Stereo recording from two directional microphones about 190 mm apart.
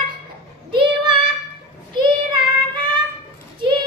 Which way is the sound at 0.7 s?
25° right (ahead or behind).